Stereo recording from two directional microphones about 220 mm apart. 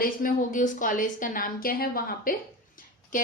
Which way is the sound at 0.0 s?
40° left (ahead or behind).